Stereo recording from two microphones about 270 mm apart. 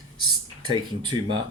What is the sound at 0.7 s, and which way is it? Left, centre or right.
Speech, centre.